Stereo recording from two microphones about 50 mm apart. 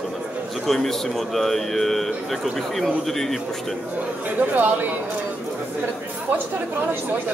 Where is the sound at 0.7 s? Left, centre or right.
Centre.